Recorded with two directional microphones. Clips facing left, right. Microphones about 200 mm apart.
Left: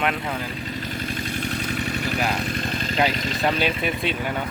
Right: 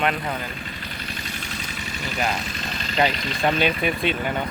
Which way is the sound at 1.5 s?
60° left (ahead or behind).